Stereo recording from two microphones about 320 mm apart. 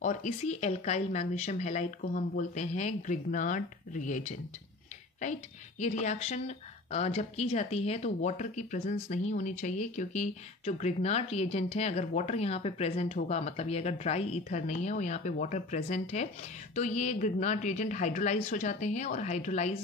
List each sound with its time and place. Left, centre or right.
0.0 s speech: left